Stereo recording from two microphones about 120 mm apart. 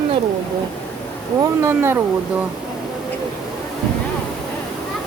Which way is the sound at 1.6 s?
20° right (ahead or behind).